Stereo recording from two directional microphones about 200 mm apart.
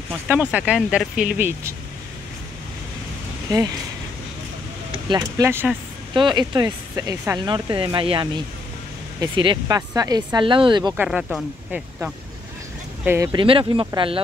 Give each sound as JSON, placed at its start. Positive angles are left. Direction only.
{"t": 0.1, "sound": "speech", "side_deg": -10}
{"t": 4.9, "sound": "speech", "side_deg": -20}
{"t": 6.1, "sound": "speech", "side_deg": -25}
{"t": 11.0, "sound": "speech", "side_deg": -5}